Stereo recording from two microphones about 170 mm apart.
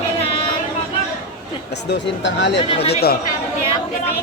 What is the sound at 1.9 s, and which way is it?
Speech, 90° left.